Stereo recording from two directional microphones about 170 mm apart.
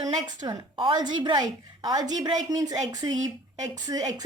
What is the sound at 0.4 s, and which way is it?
A woman's voice, 30° right (ahead or behind).